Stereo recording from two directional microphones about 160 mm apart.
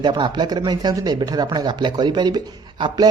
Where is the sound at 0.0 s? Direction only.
30° right (ahead or behind).